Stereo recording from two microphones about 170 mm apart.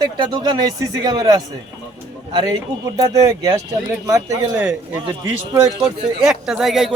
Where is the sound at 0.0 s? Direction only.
25° right (ahead or behind).